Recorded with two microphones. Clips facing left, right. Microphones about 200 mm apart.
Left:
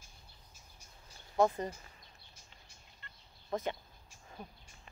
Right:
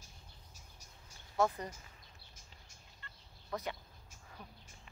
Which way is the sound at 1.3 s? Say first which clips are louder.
Left 4 dB; 25° left (ahead or behind).